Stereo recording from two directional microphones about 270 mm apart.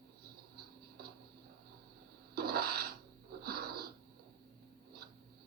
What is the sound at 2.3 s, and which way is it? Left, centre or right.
Filing, right.